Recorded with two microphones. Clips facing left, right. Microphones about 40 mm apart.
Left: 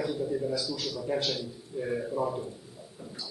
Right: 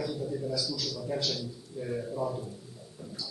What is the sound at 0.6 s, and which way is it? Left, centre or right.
A man's voice, left.